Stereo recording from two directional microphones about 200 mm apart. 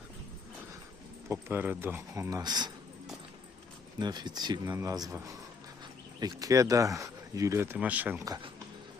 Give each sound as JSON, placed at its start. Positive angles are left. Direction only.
{"t": 1.3, "sound": "speech", "side_deg": -10}
{"t": 3.9, "sound": "speech", "side_deg": -20}